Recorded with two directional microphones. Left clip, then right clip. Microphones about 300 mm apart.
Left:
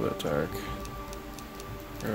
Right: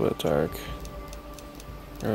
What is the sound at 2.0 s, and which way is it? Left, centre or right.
Speech, centre.